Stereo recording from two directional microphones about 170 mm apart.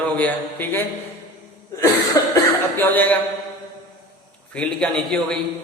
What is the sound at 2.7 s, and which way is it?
Speech, 10° left (ahead or behind).